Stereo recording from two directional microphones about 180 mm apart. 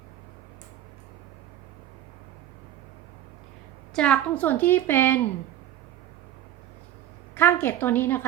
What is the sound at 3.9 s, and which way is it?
A woman's voice, 5° left (ahead or behind).